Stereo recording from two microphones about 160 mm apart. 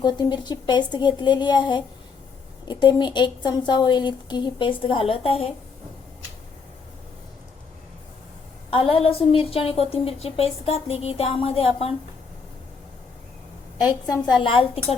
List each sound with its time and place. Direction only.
0.0 s a woman's voice: 25° left (ahead or behind)
8.7 s a woman's voice: 35° left (ahead or behind)
13.8 s a woman's voice: 30° left (ahead or behind)